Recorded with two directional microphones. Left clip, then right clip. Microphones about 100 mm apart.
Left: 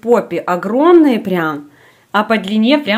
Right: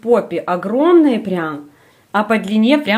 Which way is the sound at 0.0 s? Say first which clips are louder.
Left 2 dB; 25° left (ahead or behind).